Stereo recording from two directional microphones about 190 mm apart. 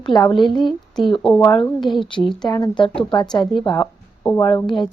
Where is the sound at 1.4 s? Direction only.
20° left (ahead or behind).